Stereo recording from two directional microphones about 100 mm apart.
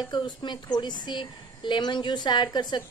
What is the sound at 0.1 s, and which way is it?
Speech, 50° left (ahead or behind).